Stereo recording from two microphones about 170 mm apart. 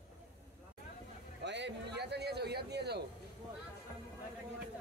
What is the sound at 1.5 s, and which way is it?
A man's voice, 90° right.